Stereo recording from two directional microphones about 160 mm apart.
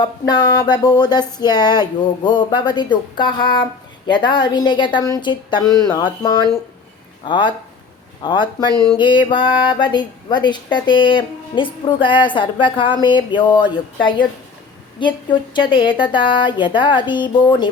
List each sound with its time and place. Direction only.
0.0 s speech: 25° left (ahead or behind)